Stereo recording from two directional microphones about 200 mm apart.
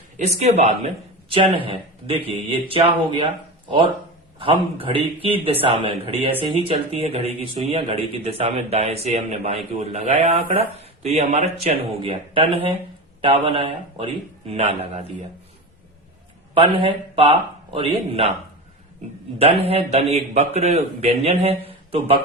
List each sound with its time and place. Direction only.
0.3 s a man's voice: 35° right (ahead or behind)
4.4 s a man's voice: 25° right (ahead or behind)
16.6 s a man's voice: 25° right (ahead or behind)
19.4 s speech: 30° right (ahead or behind)
21.7 s a sound: 30° right (ahead or behind)